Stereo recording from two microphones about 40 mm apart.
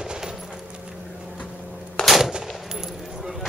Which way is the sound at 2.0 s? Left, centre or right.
Centre.